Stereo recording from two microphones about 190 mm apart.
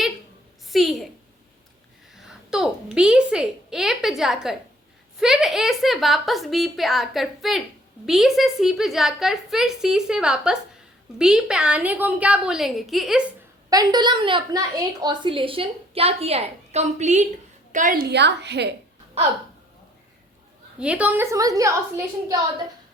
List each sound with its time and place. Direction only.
0.7 s a woman's voice: centre (ahead or behind)
2.1 s a woman's voice: centre (ahead or behind)
13.7 s a woman's voice: 20° right (ahead or behind); by 18.7 s 65° right (ahead or behind)
20.7 s a woman's voice: 5° right (ahead or behind)